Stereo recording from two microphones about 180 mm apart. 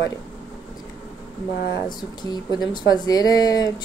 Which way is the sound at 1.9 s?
25° left (ahead or behind).